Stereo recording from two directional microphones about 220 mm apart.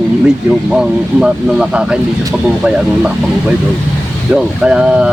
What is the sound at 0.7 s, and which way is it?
Speech, 5° right (ahead or behind).